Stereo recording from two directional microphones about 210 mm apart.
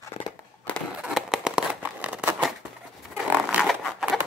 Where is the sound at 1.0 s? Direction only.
5° right (ahead or behind).